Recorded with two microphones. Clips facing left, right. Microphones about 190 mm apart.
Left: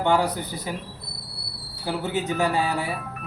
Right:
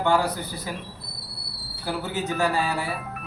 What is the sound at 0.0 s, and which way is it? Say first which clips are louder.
Speech: left 1 dB; 20° left (ahead or behind).